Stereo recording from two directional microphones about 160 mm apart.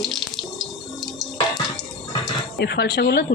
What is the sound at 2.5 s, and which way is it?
Speech, 90° left.